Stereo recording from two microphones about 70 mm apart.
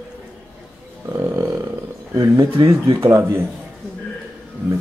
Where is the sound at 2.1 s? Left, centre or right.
Right.